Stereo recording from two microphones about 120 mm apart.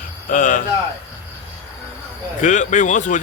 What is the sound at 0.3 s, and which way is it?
Speech, 90° left.